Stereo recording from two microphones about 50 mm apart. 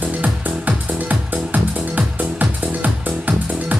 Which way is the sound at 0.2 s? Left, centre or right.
Right.